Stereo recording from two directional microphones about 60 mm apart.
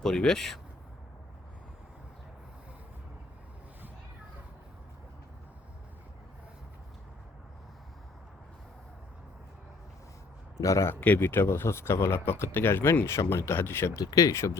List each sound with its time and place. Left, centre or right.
0.0 s speech: centre
10.6 s speech: left
11.0 s speech: left
13.9 s speech: left